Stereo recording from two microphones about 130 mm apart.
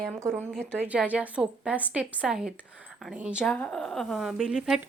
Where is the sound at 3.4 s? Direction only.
5° left (ahead or behind).